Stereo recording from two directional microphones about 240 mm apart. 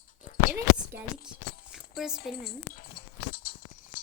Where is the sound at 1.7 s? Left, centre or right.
Centre.